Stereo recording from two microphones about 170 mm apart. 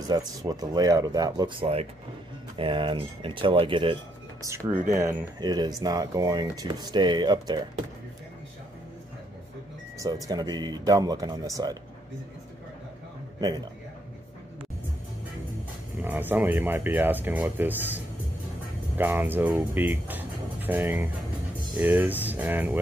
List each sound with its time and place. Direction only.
0.0 s speech: 20° right (ahead or behind)
4.4 s speech: 15° right (ahead or behind)
9.9 s speech: 20° right (ahead or behind)
16.0 s speech: 10° right (ahead or behind)